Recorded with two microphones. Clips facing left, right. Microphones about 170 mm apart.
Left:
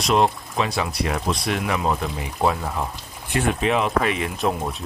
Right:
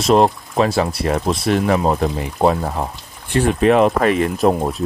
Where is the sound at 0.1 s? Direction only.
40° right (ahead or behind).